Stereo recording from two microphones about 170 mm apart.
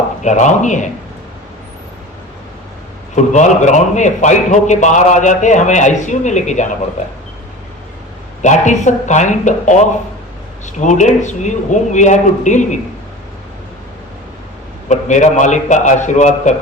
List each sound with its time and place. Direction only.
0.2 s a man's voice: 45° left (ahead or behind)
3.2 s a man's voice: 45° left (ahead or behind)
8.4 s a man's voice: 45° left (ahead or behind)
14.8 s a man's voice: 45° left (ahead or behind)